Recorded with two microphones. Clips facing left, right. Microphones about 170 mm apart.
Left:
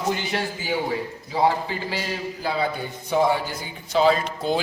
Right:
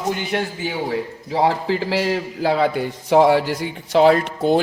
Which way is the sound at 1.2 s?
75° right (ahead or behind).